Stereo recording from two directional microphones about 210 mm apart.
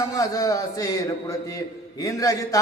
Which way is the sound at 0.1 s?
15° left (ahead or behind).